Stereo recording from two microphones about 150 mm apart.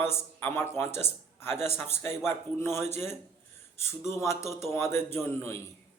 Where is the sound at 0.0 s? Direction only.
15° left (ahead or behind).